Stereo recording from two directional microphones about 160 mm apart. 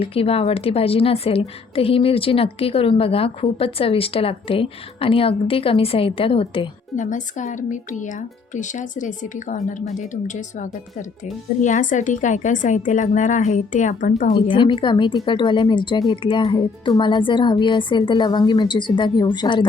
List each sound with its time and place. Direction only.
0.0 s a woman's voice: 35° left (ahead or behind)
6.9 s a woman's voice: 50° left (ahead or behind)
14.3 s a woman's voice: 30° left (ahead or behind)